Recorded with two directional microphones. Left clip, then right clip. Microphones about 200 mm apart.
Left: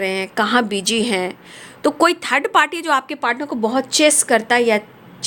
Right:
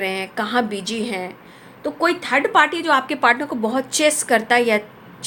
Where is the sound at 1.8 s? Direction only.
50° left (ahead or behind).